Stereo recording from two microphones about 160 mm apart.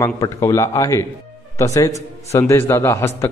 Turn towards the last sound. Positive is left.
turn(degrees=15)  # may be behind; listen again after turning